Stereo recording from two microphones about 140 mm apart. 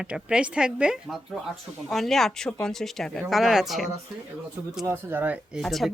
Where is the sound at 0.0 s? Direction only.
5° right (ahead or behind).